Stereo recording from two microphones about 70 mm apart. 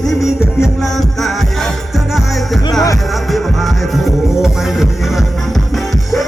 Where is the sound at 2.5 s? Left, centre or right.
Centre.